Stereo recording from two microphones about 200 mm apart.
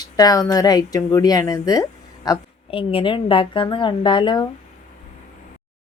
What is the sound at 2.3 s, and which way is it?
A woman's voice, 25° left (ahead or behind).